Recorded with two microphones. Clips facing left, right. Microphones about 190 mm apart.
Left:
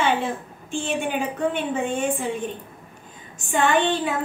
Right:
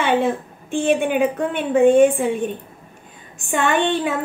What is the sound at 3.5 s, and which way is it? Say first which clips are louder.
Speech: right 1 dB; 60° right (ahead or behind).